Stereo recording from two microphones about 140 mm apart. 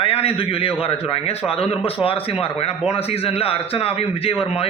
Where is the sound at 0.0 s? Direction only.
45° left (ahead or behind).